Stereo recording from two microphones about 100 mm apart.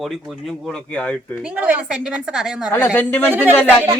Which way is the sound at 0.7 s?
10° left (ahead or behind).